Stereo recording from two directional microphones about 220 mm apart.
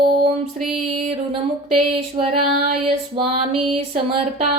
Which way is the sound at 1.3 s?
25° right (ahead or behind).